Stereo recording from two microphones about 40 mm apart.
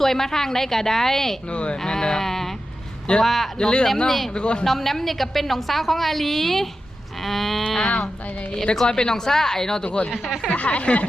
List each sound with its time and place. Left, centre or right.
0.0 s speech: centre
1.5 s speech: left
1.8 s a woman's voice: centre
3.6 s speech: centre
4.6 s a woman's voice: centre
7.9 s speech: left
8.7 s speech: centre
9.8 s speech: left
10.2 s speech: centre
10.5 s speech: left